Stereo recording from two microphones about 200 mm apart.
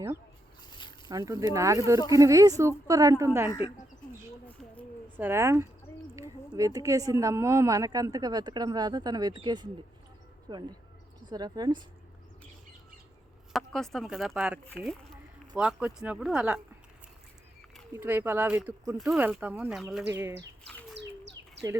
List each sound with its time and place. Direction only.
0.7 s a sound: 20° left (ahead or behind)
1.0 s speech: 20° right (ahead or behind)
4.4 s a sound: 10° left (ahead or behind)
5.1 s a woman's voice: 10° right (ahead or behind)
13.5 s speech: centre (ahead or behind)
17.9 s speech: 10° right (ahead or behind)